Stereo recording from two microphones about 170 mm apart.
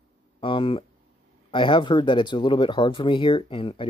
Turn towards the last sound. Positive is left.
turn(degrees=30)  # may be behind; listen again after turning